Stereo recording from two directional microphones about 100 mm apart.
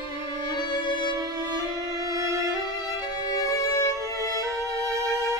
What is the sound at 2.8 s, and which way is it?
Violin, 40° left (ahead or behind).